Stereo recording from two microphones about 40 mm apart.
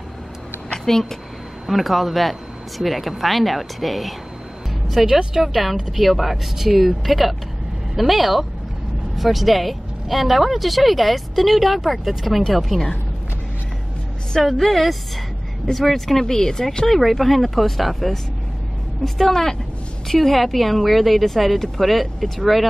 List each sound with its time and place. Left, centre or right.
1.7 s a woman's voice: centre
14.4 s speech: centre